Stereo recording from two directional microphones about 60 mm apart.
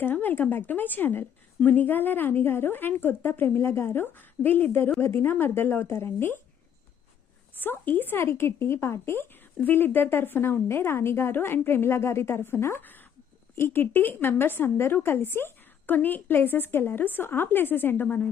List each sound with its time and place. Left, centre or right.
0.0 s a woman's voice: left
7.6 s a woman's voice: left
12.8 s a woman's voice: left